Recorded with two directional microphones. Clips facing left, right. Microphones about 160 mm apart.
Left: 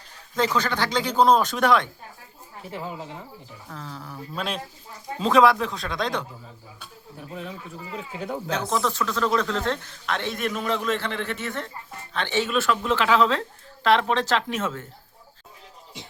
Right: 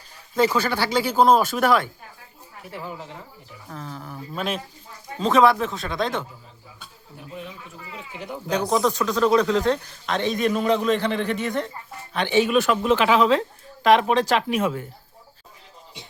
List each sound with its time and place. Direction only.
0.3 s speech: 10° right (ahead or behind)
2.7 s speech: 15° left (ahead or behind)
3.7 s speech: 5° right (ahead or behind)
8.4 s speech: 15° right (ahead or behind)